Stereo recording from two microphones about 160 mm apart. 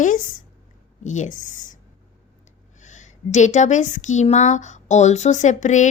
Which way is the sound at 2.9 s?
50° left (ahead or behind).